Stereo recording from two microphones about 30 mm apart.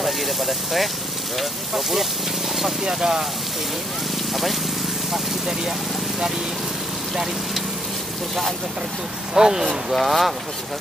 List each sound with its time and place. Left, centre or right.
0.0 s vehicle: centre
1.8 s speech: centre
2.8 s speech: centre
4.3 s speech: centre
5.1 s speech: centre
9.3 s speech: centre
9.9 s speech: centre